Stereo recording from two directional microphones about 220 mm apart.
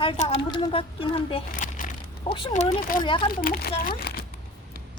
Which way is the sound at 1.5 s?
35° left (ahead or behind).